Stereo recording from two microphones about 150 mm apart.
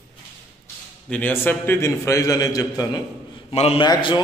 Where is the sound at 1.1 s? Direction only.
10° left (ahead or behind).